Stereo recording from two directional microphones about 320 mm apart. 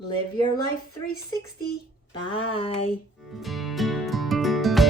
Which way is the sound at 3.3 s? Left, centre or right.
Centre.